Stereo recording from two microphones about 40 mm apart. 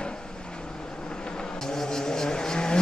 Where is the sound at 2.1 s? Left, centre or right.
Centre.